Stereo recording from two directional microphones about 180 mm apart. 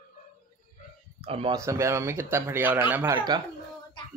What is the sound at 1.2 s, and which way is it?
Speech, 30° right (ahead or behind).